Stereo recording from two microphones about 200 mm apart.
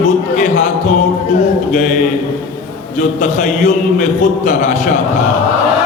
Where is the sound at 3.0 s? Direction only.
40° left (ahead or behind).